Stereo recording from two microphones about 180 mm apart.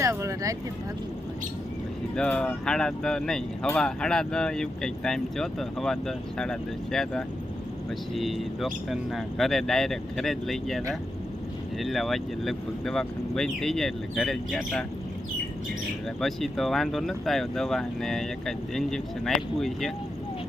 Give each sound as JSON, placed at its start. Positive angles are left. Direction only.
{"t": 0.0, "sound": "a sound", "side_deg": -15}
{"t": 2.1, "sound": "speech", "side_deg": 5}
{"t": 16.2, "sound": "speech", "side_deg": 0}